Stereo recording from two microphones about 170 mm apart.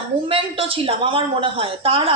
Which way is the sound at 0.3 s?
35° right (ahead or behind).